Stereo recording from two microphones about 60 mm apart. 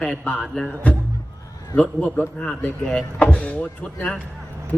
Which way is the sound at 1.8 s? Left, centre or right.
Centre.